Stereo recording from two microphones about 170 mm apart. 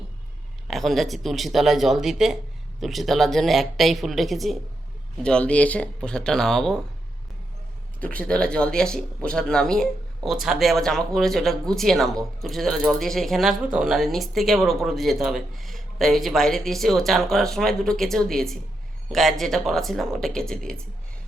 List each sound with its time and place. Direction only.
0.7 s speech: centre (ahead or behind)
8.0 s speech: 5° left (ahead or behind)